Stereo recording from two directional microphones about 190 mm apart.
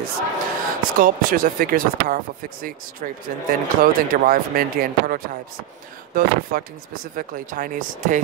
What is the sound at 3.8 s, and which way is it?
Speech, 50° right (ahead or behind).